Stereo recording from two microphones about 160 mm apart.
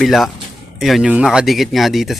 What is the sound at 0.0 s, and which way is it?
Speech, centre (ahead or behind).